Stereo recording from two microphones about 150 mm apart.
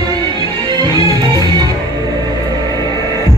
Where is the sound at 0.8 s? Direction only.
25° right (ahead or behind).